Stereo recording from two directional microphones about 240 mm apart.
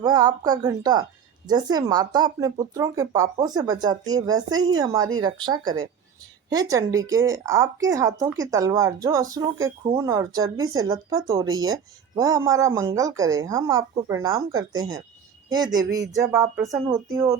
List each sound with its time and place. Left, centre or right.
0.0 s speech: centre